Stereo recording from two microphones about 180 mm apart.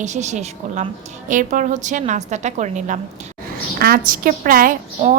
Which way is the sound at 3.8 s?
55° right (ahead or behind).